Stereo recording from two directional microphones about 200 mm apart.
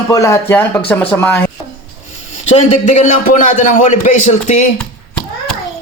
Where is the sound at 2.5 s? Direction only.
35° left (ahead or behind).